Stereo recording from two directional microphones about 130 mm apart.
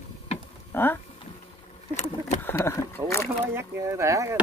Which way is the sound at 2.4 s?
20° left (ahead or behind).